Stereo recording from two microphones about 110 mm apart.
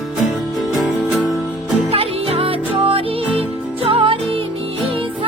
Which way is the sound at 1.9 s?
60° right (ahead or behind).